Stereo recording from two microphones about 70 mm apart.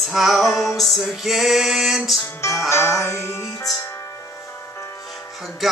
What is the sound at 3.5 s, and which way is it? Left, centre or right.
Music, left.